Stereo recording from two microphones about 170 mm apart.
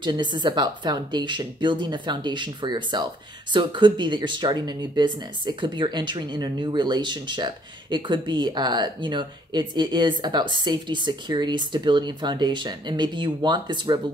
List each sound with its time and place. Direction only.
0.0 s speech: 25° right (ahead or behind)